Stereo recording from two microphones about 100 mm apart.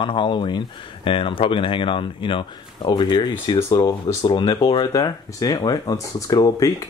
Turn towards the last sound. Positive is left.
turn(degrees=35)  # may be behind; listen again after turning